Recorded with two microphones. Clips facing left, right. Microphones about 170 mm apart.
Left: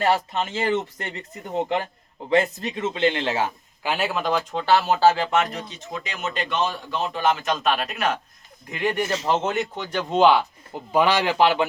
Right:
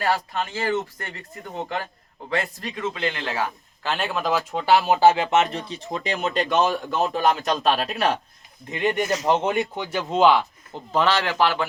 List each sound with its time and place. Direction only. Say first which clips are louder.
0.0 s speech: left 2 dB; 25° left (ahead or behind)
3.8 s speech: left 1 dB; 5° left (ahead or behind); by 8.2 s 30° right (ahead or behind)
8.7 s a man's voice: right 1 dB; 20° right (ahead or behind); by 10.8 s centre (ahead or behind)
10.9 s speech: left 2 dB; 15° left (ahead or behind)